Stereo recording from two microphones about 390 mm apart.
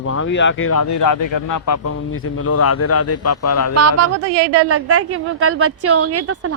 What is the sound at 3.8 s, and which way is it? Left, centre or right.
A man's voice, right.